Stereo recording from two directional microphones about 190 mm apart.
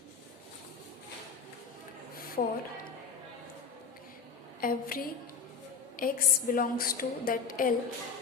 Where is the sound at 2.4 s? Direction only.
40° left (ahead or behind).